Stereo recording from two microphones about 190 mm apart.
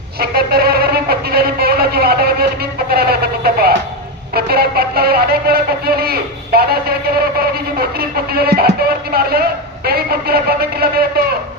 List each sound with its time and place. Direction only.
0.2 s a man's voice: 55° right (ahead or behind)